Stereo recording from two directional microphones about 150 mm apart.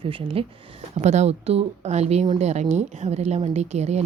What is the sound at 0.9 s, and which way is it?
A woman's voice, 50° right (ahead or behind).